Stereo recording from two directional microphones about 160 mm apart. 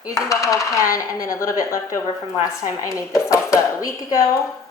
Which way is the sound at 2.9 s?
20° left (ahead or behind).